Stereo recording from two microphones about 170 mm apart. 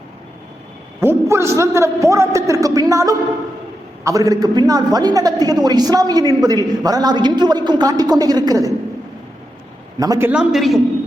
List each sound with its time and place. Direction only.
1.0 s a man's voice: 15° right (ahead or behind)
10.0 s a man's voice: 15° right (ahead or behind)
10.5 s a woman's voice: centre (ahead or behind)